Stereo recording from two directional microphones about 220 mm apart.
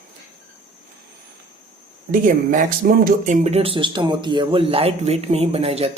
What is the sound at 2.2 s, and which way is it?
Speech, 35° right (ahead or behind).